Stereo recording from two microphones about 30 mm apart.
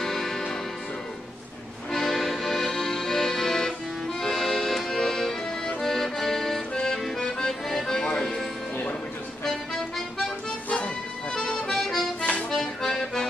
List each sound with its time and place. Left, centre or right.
0.0 s music: centre
1.9 s music: centre
2.1 s accordion: centre
6.7 s accordion: left
7.8 s music: left
9.4 s music: centre
11.3 s accordion: left
12.2 s accordion: left
12.4 s accordion: centre